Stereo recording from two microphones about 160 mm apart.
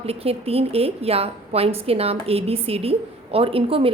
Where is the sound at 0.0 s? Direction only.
40° right (ahead or behind).